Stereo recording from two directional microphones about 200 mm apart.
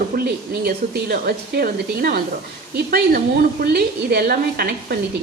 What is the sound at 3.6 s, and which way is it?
A woman's voice, 50° right (ahead or behind).